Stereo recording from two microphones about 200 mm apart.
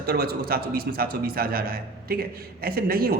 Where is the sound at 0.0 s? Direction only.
50° right (ahead or behind).